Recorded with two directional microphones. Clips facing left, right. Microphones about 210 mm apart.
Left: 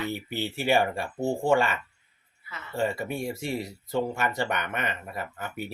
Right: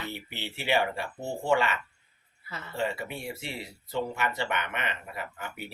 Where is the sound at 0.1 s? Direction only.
45° left (ahead or behind).